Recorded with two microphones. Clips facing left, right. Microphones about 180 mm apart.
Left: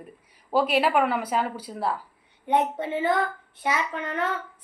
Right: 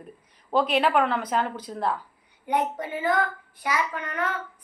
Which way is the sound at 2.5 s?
25° left (ahead or behind).